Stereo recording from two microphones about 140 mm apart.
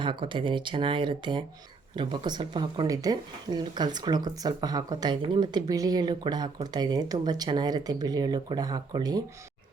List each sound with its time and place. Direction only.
0.0 s speech: 35° right (ahead or behind)